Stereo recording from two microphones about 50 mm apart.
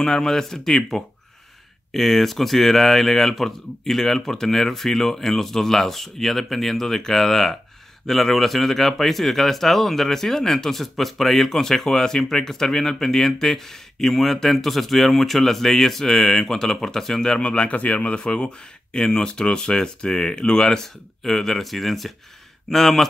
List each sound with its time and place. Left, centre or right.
0.0 s speech: centre
17.4 s speech: left; by 23.0 s centre